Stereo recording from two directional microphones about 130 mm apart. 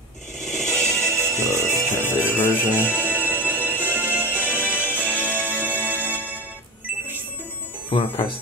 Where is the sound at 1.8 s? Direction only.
15° left (ahead or behind).